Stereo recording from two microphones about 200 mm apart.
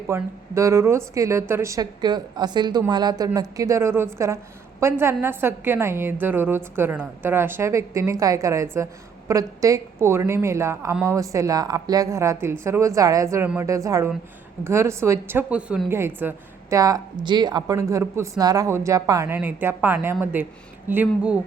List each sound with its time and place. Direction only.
0.1 s a woman's voice: 15° right (ahead or behind)